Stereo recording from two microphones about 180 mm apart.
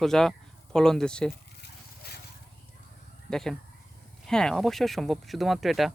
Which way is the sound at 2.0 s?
60° left (ahead or behind).